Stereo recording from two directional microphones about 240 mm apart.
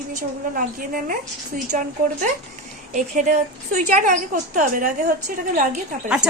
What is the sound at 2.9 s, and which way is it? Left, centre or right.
A woman's voice, right.